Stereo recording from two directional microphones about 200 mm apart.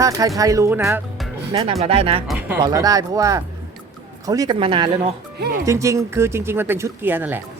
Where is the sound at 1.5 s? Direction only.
30° right (ahead or behind).